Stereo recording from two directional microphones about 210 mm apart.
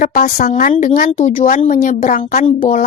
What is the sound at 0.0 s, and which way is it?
A woman's voice, 40° left (ahead or behind).